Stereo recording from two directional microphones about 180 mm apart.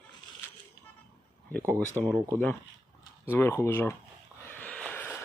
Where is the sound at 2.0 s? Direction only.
20° right (ahead or behind).